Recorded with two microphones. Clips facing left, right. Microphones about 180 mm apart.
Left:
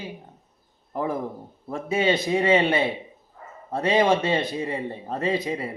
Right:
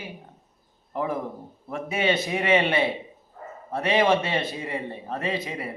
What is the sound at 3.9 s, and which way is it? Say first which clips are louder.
A man's voice: left 1 dB; 20° left (ahead or behind).